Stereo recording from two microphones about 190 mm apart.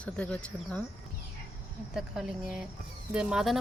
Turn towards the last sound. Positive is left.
turn(degrees=-5)  # may be behind; listen again after turning